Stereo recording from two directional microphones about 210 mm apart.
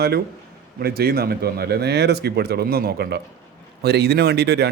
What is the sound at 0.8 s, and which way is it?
A man's voice, 50° right (ahead or behind).